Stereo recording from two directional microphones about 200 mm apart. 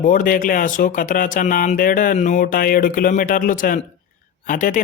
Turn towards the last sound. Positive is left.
turn(degrees=40)  # may be behind; listen again after turning